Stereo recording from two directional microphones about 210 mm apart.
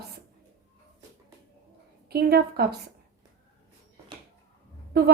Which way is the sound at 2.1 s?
50° right (ahead or behind).